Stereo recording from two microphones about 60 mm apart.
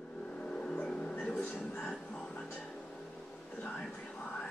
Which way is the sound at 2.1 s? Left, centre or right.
Centre.